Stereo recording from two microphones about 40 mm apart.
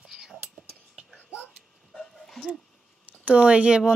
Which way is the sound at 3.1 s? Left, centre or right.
Right.